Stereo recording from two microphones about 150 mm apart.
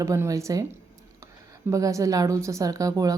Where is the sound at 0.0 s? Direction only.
20° right (ahead or behind).